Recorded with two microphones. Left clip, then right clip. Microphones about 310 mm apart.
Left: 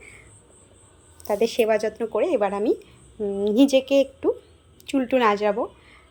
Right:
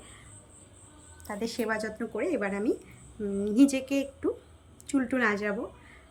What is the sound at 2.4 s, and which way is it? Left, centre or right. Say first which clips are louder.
Speech: left 8 dB; left.